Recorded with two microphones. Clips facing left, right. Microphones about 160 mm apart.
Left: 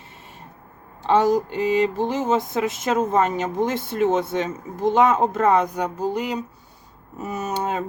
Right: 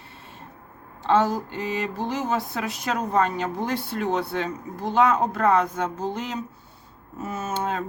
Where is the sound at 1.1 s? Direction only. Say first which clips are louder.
Left 3 dB; 15° left (ahead or behind).